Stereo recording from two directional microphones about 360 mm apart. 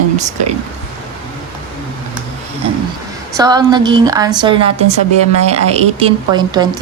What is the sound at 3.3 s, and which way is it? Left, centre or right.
A woman's voice, centre.